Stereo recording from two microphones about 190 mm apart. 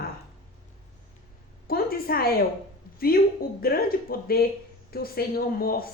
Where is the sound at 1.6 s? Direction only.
50° left (ahead or behind).